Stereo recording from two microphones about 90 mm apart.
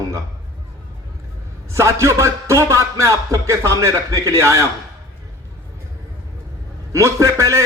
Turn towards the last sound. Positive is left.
turn(degrees=-35)  # may be behind; listen again after turning